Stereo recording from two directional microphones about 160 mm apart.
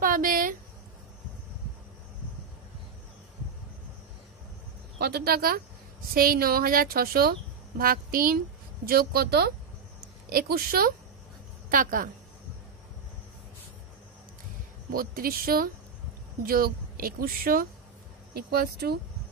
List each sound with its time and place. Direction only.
0.0 s a sound: 60° right (ahead or behind)
4.9 s a woman's voice: 80° right
10.3 s a woman's voice: 70° right (ahead or behind)
14.9 s a woman's voice: 65° right (ahead or behind)
18.3 s speech: 80° right